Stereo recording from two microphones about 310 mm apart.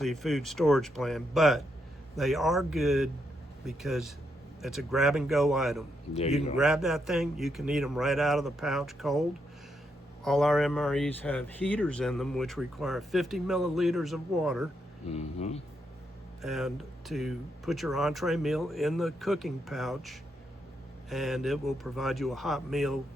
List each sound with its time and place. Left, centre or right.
0.0 s speech: centre
10.2 s speech: centre
15.0 s speech: left
16.4 s speech: centre